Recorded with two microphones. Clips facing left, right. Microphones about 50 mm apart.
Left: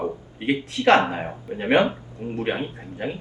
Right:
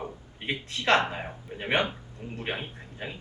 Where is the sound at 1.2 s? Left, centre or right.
Left.